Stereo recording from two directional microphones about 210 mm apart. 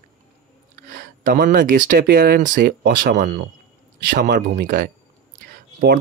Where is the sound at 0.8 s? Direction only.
40° right (ahead or behind).